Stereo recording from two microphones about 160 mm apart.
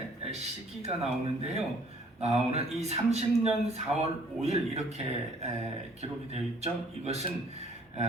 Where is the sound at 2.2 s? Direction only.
40° right (ahead or behind).